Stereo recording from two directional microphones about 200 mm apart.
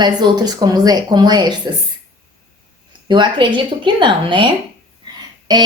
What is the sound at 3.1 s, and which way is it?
A woman's voice, 25° right (ahead or behind).